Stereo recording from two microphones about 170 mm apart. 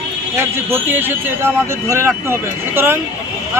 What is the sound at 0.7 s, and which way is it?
Speech, 10° right (ahead or behind).